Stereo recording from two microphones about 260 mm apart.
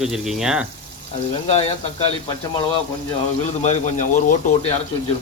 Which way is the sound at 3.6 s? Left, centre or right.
Left.